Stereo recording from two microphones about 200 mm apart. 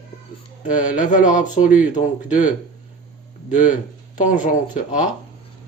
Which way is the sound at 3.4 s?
40° left (ahead or behind).